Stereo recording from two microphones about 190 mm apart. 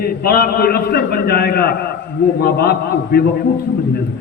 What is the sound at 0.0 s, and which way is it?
A man's voice, 50° left (ahead or behind).